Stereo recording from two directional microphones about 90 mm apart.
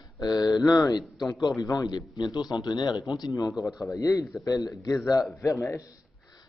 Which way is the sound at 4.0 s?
35° left (ahead or behind).